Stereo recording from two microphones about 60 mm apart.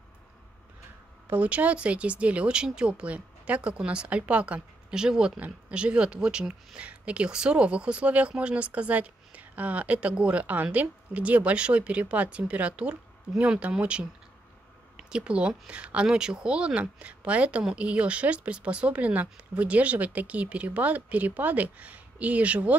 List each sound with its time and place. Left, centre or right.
1.3 s speech: right
4.6 s speech: centre